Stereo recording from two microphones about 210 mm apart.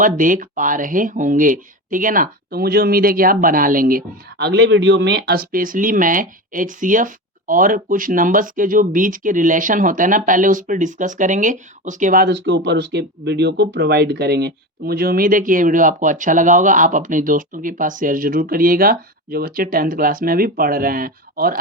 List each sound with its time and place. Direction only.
0.0 s speech: 40° right (ahead or behind)